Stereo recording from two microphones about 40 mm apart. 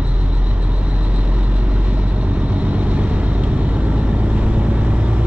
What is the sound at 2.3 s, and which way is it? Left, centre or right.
Vehicle, right.